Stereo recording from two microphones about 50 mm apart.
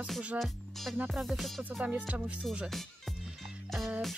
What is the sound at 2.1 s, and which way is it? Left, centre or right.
Music, right.